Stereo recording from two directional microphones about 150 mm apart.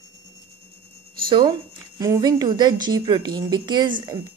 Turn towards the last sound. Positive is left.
turn(degrees=-30)  # may be behind; listen again after turning